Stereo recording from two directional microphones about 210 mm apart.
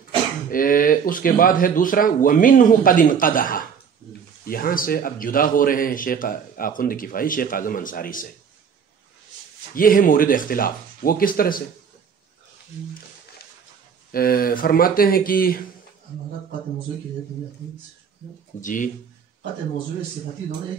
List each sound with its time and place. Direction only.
0.5 s a man's voice: 40° left (ahead or behind)
9.8 s a man's voice: 40° left (ahead or behind)
14.1 s a man's voice: 45° left (ahead or behind)
18.6 s speech: 40° left (ahead or behind)